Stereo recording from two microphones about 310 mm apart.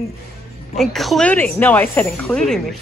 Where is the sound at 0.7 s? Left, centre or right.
Centre.